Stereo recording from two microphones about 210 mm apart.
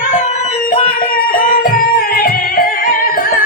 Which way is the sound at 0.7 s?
40° left (ahead or behind).